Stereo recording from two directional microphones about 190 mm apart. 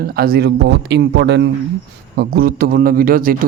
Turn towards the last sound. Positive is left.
turn(degrees=-50)  # may be behind; listen again after turning